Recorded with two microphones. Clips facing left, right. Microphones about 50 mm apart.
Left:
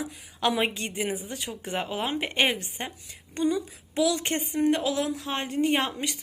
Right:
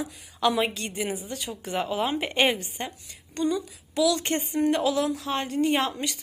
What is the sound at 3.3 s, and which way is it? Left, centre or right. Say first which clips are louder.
A woman's voice: even; centre.